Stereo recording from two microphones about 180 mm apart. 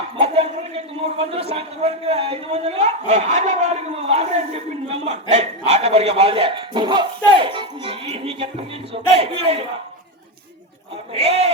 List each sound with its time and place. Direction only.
0.2 s a man's voice: 35° right (ahead or behind)
11.1 s a man's voice: 35° right (ahead or behind)